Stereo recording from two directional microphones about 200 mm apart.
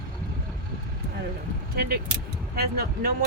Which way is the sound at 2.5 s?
50° right (ahead or behind).